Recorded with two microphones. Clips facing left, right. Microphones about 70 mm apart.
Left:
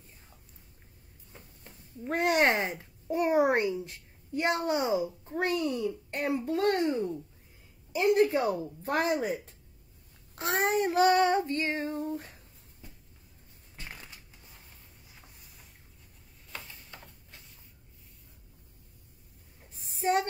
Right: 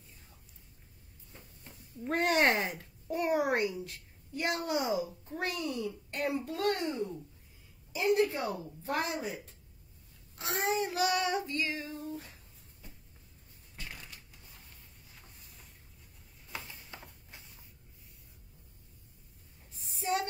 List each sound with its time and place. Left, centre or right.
2.0 s speech: centre
2.3 s a woman's voice: left
9.1 s child singing: left
10.3 s a child's voice: left
10.9 s child singing: left
13.7 s crushing: left
16.5 s a sound: centre
19.8 s a sound: left